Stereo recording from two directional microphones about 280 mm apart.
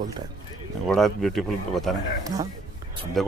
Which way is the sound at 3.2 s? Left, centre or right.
Centre.